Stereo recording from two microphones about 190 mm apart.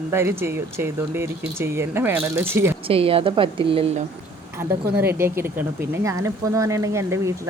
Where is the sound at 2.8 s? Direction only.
30° right (ahead or behind).